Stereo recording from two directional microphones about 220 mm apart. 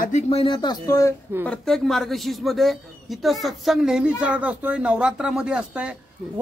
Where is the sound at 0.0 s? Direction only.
30° left (ahead or behind).